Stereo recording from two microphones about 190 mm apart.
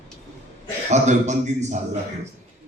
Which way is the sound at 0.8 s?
40° right (ahead or behind).